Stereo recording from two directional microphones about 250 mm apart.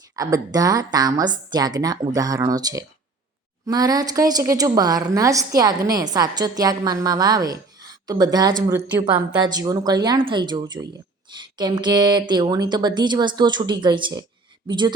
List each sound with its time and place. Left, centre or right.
0.2 s a woman's voice: centre